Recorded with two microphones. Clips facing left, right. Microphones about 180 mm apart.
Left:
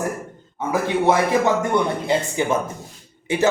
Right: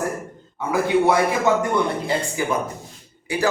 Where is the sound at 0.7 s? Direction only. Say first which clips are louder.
Right 1 dB; 20° left (ahead or behind).